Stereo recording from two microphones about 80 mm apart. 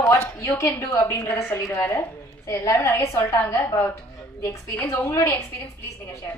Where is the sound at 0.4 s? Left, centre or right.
Left.